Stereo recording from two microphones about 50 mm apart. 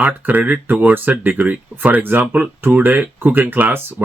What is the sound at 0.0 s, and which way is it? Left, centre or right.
Speech, right.